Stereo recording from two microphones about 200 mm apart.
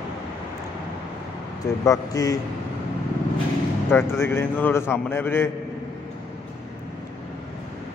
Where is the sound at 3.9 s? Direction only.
10° left (ahead or behind).